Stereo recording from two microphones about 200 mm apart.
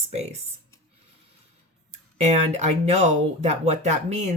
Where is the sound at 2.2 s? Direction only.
35° right (ahead or behind).